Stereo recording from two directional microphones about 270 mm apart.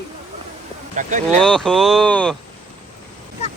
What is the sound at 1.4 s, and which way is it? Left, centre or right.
Speech, centre.